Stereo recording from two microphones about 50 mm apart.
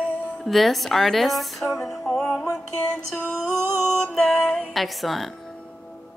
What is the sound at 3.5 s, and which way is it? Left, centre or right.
Music, right.